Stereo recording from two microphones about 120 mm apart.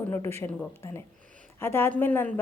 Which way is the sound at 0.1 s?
20° left (ahead or behind).